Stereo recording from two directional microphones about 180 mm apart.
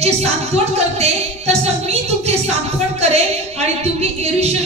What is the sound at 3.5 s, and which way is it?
Music, 35° right (ahead or behind).